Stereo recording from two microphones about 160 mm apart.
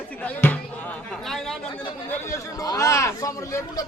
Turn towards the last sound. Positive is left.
turn(degrees=20)  # may be behind; listen again after turning